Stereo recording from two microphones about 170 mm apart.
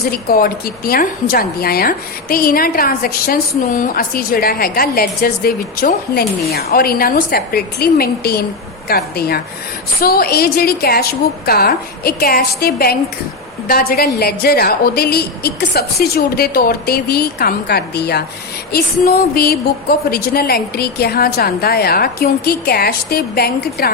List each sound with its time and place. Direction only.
0.0 s speech: 60° left (ahead or behind)